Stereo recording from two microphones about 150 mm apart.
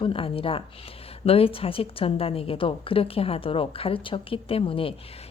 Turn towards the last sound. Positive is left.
turn(degrees=35)  # may be behind; listen again after turning